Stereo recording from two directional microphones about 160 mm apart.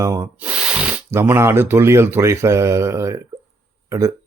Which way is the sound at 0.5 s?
5° right (ahead or behind).